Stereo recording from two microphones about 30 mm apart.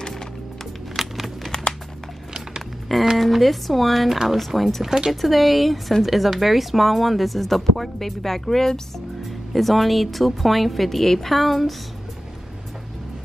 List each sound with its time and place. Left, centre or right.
0.9 s a sound: centre
2.9 s speech: centre
4.8 s speech: centre
5.1 s speech: centre